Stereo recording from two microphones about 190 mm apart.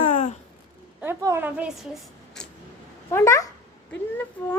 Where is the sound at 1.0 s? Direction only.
10° right (ahead or behind).